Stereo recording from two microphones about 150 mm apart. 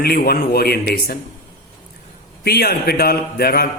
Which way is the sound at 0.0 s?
90° left.